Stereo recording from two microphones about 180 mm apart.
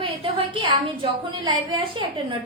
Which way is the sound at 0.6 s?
25° right (ahead or behind).